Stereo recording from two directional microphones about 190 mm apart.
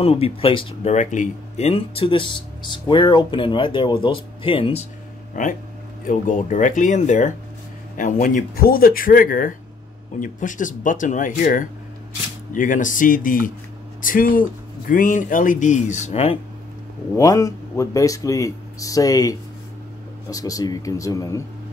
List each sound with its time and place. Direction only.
0.0 s speech: 30° left (ahead or behind)
0.9 s speech: 40° left (ahead or behind)
5.3 s speech: 45° left (ahead or behind)
17.1 s speech: 15° left (ahead or behind)